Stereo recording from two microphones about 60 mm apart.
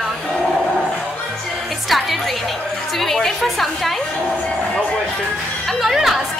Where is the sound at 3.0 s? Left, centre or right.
Centre.